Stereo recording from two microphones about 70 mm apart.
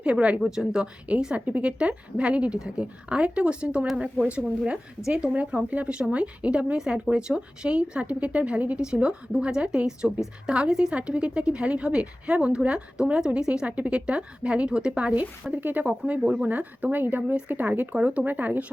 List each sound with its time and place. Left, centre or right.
0.0 s a woman's voice: centre